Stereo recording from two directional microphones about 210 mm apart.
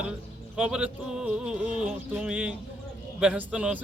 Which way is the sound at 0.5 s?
5° right (ahead or behind).